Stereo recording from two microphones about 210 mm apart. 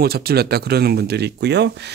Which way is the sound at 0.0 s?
50° right (ahead or behind).